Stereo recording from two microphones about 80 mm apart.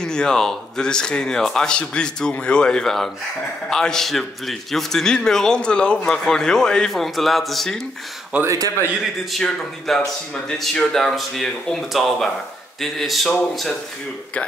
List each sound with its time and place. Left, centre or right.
0.0 s a man's voice: centre
8.5 s a man's voice: right
9.3 s speech: centre